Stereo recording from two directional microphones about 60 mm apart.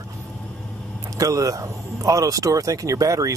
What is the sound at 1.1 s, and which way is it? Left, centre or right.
Speech, right.